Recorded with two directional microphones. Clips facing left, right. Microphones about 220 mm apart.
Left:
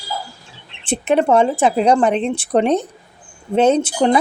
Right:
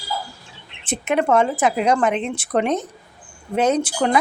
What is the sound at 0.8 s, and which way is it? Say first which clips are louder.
A woman's voice: left 4 dB; 30° left (ahead or behind).